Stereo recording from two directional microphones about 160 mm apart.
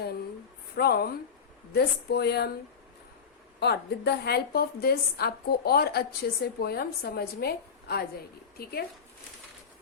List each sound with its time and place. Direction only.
0.8 s a woman's voice: 75° left (ahead or behind)
1.7 s speech: 90° left
3.6 s a woman's voice: 90° left; by 8.8 s 75° left (ahead or behind)